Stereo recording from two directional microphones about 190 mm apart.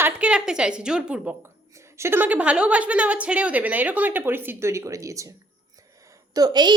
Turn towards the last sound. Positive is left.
turn(degrees=-20)  # may be behind; listen again after turning